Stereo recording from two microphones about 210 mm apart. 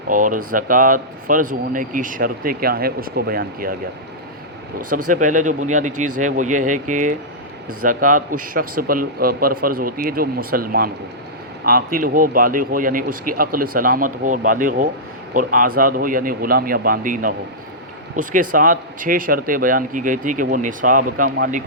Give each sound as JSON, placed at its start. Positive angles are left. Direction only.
{"t": 0.1, "sound": "speech", "side_deg": -40}
{"t": 5.0, "sound": "a man's voice", "side_deg": -40}